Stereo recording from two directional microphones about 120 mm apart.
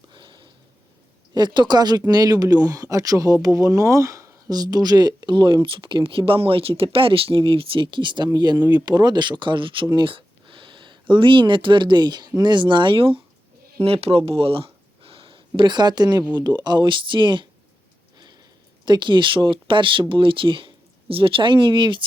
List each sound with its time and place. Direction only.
0.1 s sniff: 40° right (ahead or behind)
1.3 s speech: 40° right (ahead or behind)
18.9 s speech: 40° right (ahead or behind)